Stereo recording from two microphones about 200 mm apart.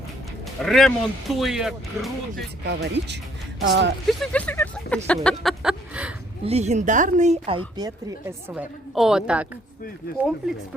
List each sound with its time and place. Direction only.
0.6 s speech: centre (ahead or behind)
2.6 s speech: 60° right (ahead or behind)
4.0 s speech: 5° left (ahead or behind)
5.0 s a sound: 5° left (ahead or behind)
6.4 s speech: 30° right (ahead or behind)
7.8 s speech: 15° right (ahead or behind)